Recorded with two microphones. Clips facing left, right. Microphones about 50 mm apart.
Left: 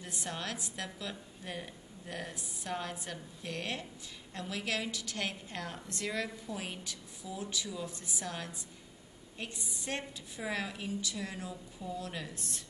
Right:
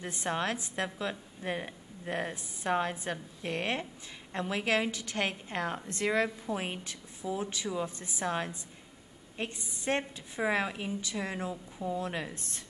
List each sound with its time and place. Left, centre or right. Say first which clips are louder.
0.0 s a woman's voice: right 7 dB; right